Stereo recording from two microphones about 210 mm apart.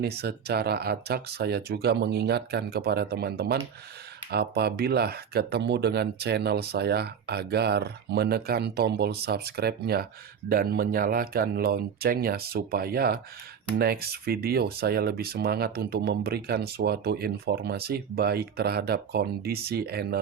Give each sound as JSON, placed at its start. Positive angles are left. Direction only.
{"t": 0.0, "sound": "speech", "side_deg": -50}